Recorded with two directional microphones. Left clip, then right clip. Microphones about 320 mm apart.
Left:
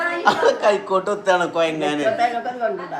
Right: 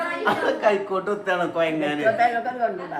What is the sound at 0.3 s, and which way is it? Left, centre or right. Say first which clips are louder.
Speech: left 4 dB; centre.